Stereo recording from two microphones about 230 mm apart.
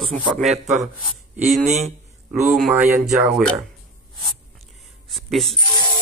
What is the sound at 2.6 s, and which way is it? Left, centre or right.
Speech, centre.